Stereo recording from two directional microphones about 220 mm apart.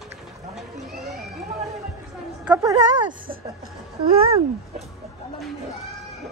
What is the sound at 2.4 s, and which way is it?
Speech, 20° right (ahead or behind).